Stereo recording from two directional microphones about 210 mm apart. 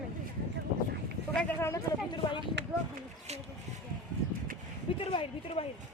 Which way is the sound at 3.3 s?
30° right (ahead or behind).